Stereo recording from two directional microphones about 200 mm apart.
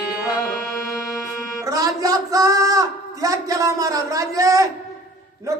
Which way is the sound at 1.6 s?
15° right (ahead or behind).